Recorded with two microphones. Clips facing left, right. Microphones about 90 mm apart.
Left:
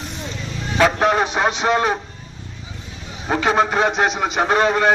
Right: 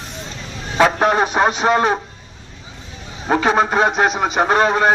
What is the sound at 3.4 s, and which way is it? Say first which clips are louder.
Speech: right 1 dB; 15° right (ahead or behind).